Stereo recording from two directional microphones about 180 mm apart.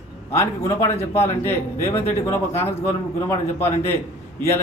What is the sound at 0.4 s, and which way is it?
Speech, 15° left (ahead or behind).